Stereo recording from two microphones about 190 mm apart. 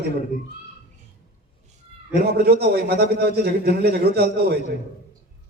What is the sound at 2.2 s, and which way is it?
A man's voice, 55° right (ahead or behind).